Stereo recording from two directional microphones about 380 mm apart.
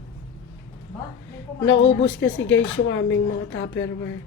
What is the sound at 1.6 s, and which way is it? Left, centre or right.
Speech, left.